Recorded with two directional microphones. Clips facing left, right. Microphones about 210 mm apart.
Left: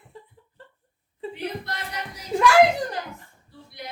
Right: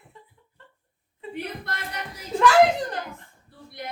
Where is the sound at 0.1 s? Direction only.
35° left (ahead or behind).